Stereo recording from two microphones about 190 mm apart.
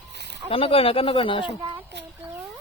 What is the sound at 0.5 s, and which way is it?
Speech, 30° left (ahead or behind).